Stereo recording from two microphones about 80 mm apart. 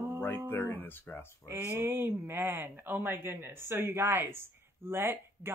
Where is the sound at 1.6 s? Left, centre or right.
Right.